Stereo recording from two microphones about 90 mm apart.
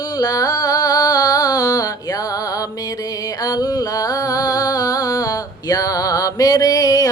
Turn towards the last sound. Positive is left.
turn(degrees=45)  # may be behind; listen again after turning